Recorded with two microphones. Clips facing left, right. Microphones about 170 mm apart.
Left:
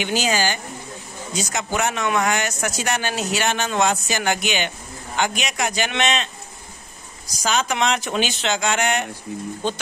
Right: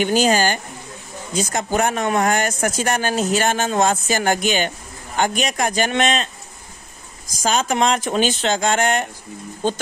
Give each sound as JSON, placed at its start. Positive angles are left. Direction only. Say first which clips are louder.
{"t": 0.0, "sound": "speech", "louder": "right 5 dB", "side_deg": -50}
{"t": 7.4, "sound": "speech", "louder": "right 3 dB", "side_deg": -45}